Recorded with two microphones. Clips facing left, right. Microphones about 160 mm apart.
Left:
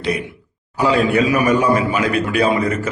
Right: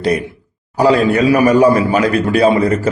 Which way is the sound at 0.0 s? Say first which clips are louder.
Right 6 dB; 40° right (ahead or behind).